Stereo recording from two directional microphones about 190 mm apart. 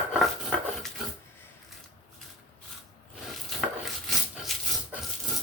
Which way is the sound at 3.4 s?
Centre (ahead or behind).